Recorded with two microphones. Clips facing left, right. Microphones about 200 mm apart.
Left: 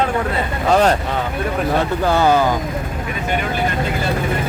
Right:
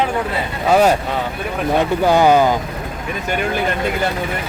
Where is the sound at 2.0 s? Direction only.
15° right (ahead or behind).